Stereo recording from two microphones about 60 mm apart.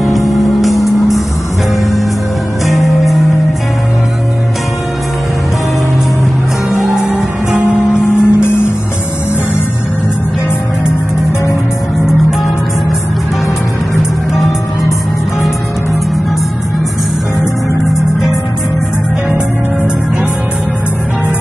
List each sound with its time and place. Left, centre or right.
0.3 s music: centre
7.6 s music: left